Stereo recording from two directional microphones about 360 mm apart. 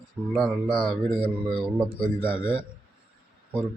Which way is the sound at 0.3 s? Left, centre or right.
Centre.